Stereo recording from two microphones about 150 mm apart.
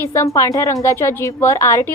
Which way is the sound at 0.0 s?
20° left (ahead or behind).